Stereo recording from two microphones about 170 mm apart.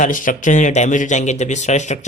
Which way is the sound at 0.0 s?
50° left (ahead or behind).